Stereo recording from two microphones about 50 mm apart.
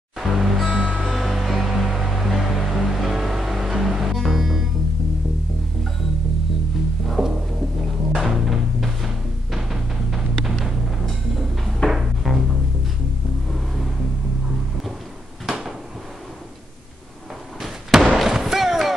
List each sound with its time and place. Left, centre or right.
0.2 s music: centre
0.7 s music: right
1.0 s music: centre
7.1 s music: centre
11.9 s music: centre
17.6 s slam: centre